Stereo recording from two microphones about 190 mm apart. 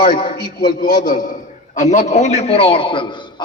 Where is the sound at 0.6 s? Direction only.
20° left (ahead or behind).